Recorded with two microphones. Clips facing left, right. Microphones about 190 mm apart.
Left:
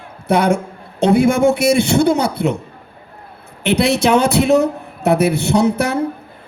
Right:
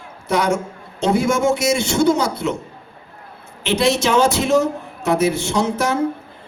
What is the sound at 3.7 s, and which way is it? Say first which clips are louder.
Speech: left 3 dB; 60° left (ahead or behind).